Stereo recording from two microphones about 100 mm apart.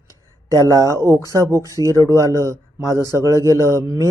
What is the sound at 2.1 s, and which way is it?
Speech, 30° right (ahead or behind).